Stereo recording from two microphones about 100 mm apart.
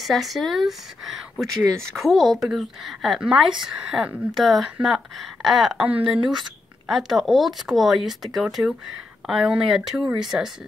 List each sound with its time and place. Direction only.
0.0 s speech: centre (ahead or behind)
3.9 s speech: 10° right (ahead or behind)
4.4 s speech: centre (ahead or behind)
5.8 s speech: 15° right (ahead or behind)
6.9 s speech: centre (ahead or behind)